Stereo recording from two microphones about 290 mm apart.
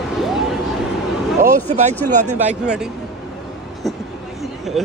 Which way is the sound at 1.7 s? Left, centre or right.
Right.